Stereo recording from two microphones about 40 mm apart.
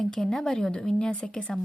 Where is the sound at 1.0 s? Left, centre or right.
Left.